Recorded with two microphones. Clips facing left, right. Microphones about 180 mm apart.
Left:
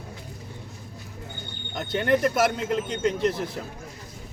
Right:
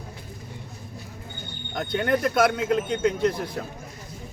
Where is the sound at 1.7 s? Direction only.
Centre (ahead or behind).